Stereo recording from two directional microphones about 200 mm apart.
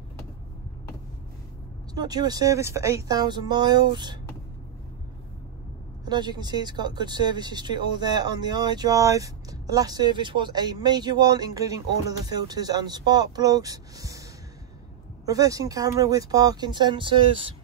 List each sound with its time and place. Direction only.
2.0 s speech: 20° right (ahead or behind)
6.0 s speech: 20° right (ahead or behind)
15.2 s speech: 15° right (ahead or behind)